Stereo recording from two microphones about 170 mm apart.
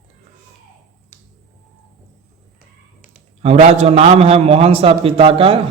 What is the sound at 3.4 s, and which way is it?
A man's voice, 40° right (ahead or behind).